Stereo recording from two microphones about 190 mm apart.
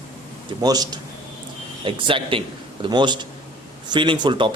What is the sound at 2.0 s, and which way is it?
Speech, 25° right (ahead or behind).